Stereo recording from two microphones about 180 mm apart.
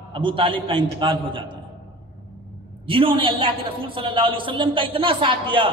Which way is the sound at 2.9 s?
30° right (ahead or behind).